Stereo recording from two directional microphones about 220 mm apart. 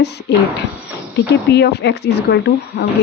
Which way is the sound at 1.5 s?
50° left (ahead or behind).